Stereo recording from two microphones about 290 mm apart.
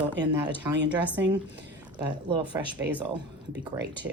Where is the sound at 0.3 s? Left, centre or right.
Centre.